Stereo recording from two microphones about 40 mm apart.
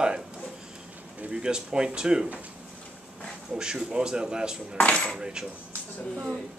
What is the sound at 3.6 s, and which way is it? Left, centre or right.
Speech, centre.